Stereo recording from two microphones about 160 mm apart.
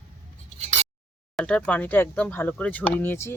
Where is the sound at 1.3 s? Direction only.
5° left (ahead or behind).